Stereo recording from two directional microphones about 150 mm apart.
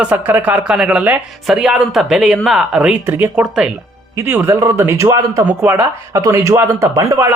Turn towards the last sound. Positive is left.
turn(degrees=-20)  # may be behind; listen again after turning